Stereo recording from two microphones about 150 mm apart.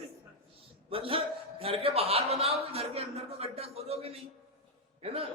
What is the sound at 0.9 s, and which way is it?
A man's voice, 40° right (ahead or behind).